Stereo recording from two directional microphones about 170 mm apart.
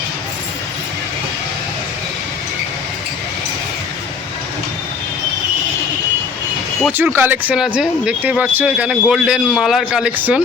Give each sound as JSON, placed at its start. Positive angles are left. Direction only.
{"t": 6.8, "sound": "speech", "side_deg": -10}